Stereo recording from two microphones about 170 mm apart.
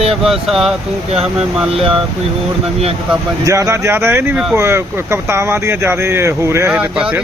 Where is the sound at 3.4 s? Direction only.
20° right (ahead or behind).